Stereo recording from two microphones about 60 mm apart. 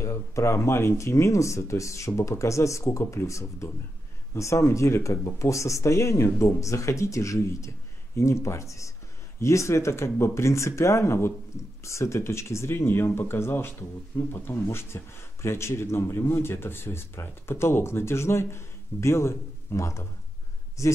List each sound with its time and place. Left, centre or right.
0.0 s speech: left
3.0 s speech: left
3.3 s speech: left